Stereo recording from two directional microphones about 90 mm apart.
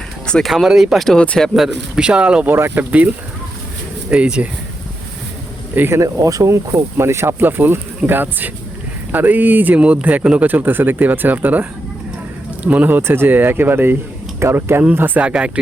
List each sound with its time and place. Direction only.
0.3 s speech: 10° left (ahead or behind)
0.5 s speech: 5° right (ahead or behind)
1.2 s speech: 15° left (ahead or behind)
1.5 s speech: 5° right (ahead or behind)
2.5 s speech: 25° right (ahead or behind)
4.1 s speech: 15° right (ahead or behind)
5.7 s speech: 20° right (ahead or behind)
6.0 s speech: 40° right (ahead or behind); by 15.5 s 10° right (ahead or behind)